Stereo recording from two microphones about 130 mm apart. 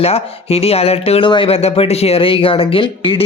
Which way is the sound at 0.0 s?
50° left (ahead or behind).